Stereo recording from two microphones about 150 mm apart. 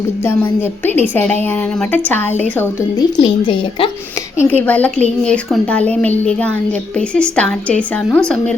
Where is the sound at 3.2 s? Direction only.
30° left (ahead or behind).